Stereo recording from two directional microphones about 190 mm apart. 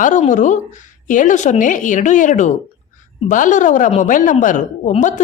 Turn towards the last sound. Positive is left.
turn(degrees=40)  # may be behind; listen again after turning